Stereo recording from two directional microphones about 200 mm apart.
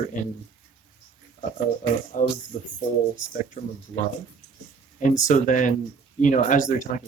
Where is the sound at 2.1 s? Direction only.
40° left (ahead or behind).